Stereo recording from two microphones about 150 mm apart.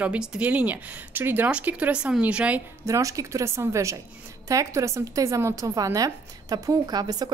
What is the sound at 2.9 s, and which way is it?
Speech, 20° right (ahead or behind).